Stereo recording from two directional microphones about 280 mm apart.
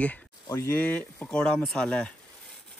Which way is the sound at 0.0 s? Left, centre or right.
Centre.